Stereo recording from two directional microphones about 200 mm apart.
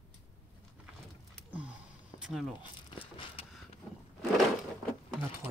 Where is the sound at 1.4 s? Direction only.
5° right (ahead or behind).